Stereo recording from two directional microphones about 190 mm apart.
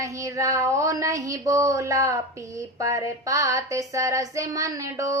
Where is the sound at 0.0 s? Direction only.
15° right (ahead or behind).